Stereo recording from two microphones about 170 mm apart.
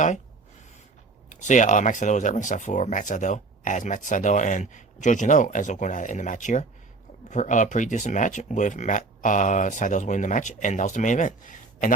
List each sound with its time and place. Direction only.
1.3 s speech: 45° left (ahead or behind)